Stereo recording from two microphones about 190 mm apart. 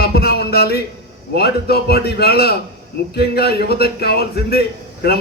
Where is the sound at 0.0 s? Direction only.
55° left (ahead or behind).